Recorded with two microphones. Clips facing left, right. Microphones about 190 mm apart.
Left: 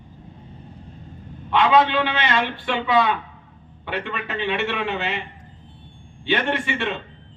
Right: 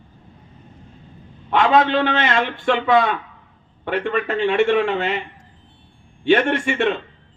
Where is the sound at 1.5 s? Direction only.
45° right (ahead or behind).